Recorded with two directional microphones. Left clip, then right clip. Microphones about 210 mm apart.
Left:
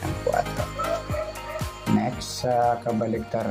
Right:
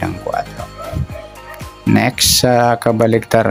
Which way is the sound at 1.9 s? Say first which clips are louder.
Right 16 dB; 55° right (ahead or behind).